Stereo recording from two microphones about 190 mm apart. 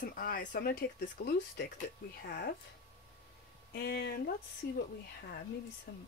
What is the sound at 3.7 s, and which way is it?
Speech, 60° left (ahead or behind).